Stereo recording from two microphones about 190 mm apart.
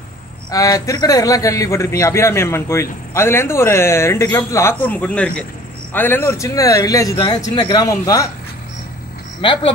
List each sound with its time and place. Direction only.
0.5 s a man's voice: 20° left (ahead or behind)
9.4 s speech: 25° left (ahead or behind)